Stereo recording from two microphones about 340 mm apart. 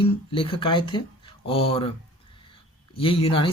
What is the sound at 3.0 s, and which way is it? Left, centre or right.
Speech, centre.